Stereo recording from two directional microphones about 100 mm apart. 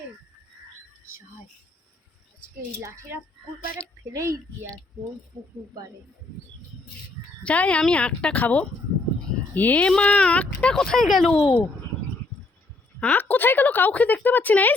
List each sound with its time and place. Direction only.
2.7 s a woman's voice: 30° right (ahead or behind)
4.1 s speech: 30° right (ahead or behind)
7.4 s speech: 15° left (ahead or behind)
13.0 s speech: 20° left (ahead or behind)